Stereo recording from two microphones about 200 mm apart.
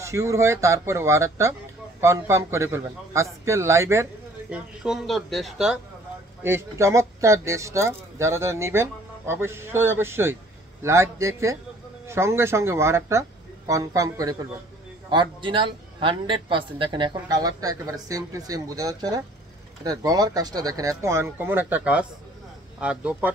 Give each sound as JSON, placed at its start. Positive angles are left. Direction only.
{"t": 0.0, "sound": "speech", "side_deg": -15}
{"t": 6.4, "sound": "a man's voice", "side_deg": -15}